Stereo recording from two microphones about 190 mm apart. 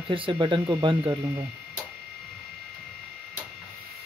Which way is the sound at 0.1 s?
25° right (ahead or behind).